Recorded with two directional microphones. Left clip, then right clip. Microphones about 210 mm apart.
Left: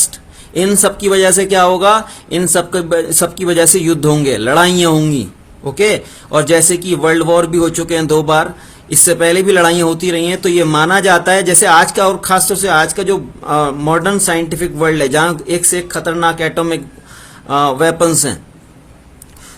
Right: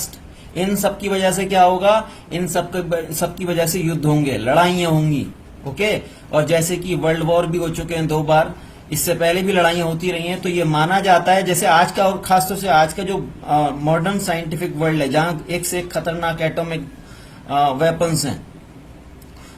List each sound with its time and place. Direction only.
0.5 s speech: 50° left (ahead or behind)
6.3 s speech: 50° left (ahead or behind)